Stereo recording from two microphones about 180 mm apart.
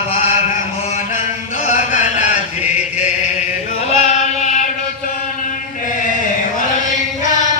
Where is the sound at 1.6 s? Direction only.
45° left (ahead or behind).